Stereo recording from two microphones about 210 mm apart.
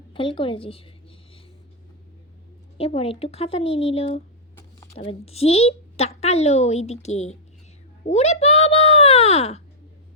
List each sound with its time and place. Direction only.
0.1 s speech: 25° left (ahead or behind)
2.7 s a woman's voice: 25° left (ahead or behind)
8.0 s a sound: 30° left (ahead or behind)